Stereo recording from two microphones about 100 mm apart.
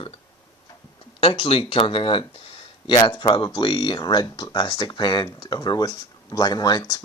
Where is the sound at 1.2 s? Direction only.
65° left (ahead or behind).